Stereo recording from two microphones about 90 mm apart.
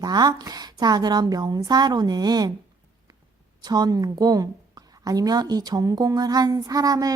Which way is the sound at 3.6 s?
50° right (ahead or behind).